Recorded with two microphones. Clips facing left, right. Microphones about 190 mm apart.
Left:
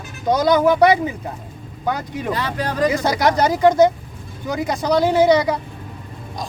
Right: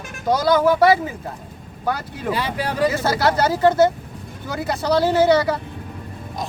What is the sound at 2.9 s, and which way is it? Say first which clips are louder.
Speech: left 2 dB; 15° left (ahead or behind).